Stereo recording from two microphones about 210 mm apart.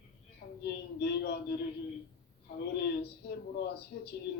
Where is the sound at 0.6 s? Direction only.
50° left (ahead or behind).